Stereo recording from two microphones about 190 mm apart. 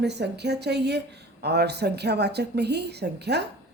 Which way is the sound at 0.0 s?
60° right (ahead or behind).